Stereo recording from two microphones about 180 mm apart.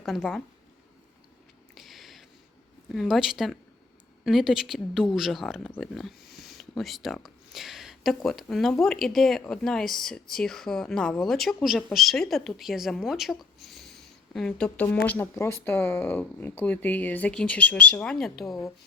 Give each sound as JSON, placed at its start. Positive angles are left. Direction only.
{"t": 0.0, "sound": "speech", "side_deg": 0}
{"t": 1.7, "sound": "a sound", "side_deg": 0}
{"t": 2.9, "sound": "speech", "side_deg": 0}